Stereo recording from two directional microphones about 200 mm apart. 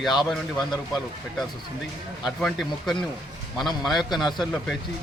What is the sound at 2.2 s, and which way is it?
Speech, centre (ahead or behind).